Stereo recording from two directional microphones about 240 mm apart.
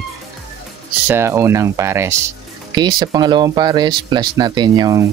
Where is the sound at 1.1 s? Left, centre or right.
Centre.